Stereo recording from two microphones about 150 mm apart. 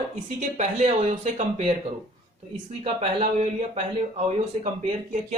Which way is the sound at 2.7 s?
45° right (ahead or behind).